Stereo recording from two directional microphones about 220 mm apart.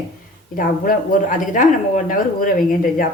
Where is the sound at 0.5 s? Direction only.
40° left (ahead or behind).